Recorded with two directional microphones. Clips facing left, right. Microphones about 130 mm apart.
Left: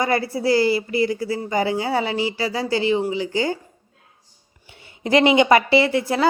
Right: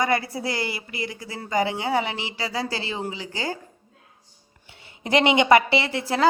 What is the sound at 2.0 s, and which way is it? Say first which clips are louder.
Speech: left 5 dB; 25° right (ahead or behind).